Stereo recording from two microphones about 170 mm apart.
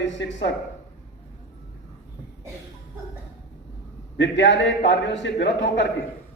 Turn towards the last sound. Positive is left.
turn(degrees=90)